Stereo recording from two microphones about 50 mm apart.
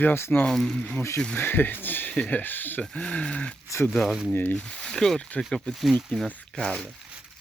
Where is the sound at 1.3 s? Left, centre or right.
Left.